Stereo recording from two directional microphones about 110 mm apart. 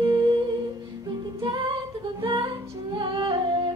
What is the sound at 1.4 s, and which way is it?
Female singing, 45° right (ahead or behind).